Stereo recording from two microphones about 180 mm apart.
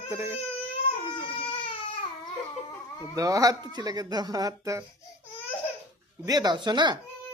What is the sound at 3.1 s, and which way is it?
Speech, 20° right (ahead or behind).